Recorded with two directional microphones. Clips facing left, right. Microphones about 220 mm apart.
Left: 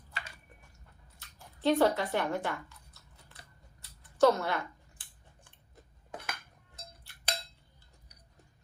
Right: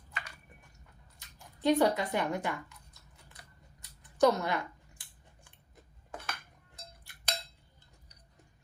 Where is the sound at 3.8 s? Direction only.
15° right (ahead or behind).